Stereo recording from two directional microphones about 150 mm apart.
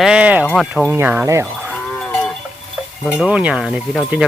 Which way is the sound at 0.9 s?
10° right (ahead or behind).